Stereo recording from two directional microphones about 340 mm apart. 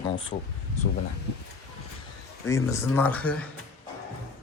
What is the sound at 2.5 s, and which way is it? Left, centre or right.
Speech, centre.